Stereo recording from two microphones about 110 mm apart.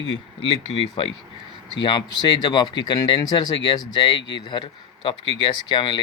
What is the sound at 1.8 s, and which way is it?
Speech, 40° left (ahead or behind).